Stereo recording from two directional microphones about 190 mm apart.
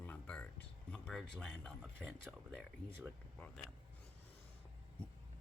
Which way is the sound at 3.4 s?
10° left (ahead or behind).